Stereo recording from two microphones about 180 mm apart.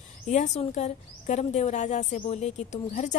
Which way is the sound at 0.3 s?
40° left (ahead or behind).